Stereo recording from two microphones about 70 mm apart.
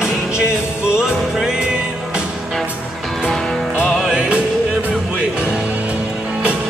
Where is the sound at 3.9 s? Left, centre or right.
Centre.